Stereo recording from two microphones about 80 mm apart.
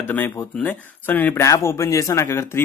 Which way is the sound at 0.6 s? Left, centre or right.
Left.